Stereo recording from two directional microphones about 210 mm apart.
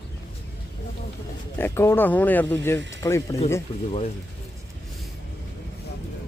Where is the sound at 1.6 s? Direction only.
10° left (ahead or behind).